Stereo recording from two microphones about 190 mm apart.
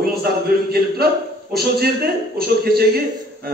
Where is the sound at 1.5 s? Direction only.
55° right (ahead or behind).